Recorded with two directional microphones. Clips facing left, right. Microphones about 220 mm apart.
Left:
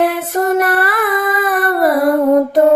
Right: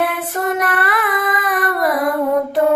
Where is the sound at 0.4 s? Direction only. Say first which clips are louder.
Left 5 dB; 40° left (ahead or behind).